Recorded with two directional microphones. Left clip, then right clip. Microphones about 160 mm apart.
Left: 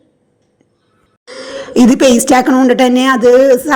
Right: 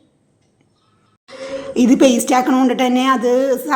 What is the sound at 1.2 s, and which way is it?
A woman's voice, 35° left (ahead or behind).